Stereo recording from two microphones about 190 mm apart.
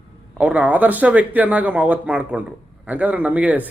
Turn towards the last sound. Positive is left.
turn(degrees=-10)  # may be behind; listen again after turning